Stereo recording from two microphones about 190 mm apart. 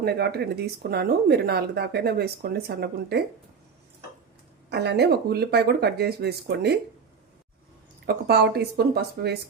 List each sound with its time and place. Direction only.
0.0 s speech: 60° right (ahead or behind)
4.7 s speech: 65° right (ahead or behind)
8.0 s speech: 55° right (ahead or behind)